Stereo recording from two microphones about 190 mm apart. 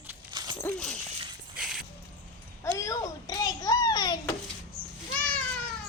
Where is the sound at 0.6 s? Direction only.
5° left (ahead or behind).